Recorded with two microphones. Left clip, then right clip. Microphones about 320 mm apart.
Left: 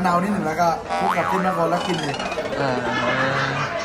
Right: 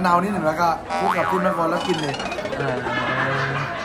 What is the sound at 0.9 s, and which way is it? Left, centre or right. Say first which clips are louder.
A man's voice: even; centre.